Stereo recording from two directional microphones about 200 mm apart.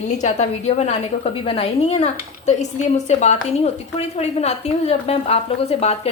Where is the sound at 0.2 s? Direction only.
35° left (ahead or behind).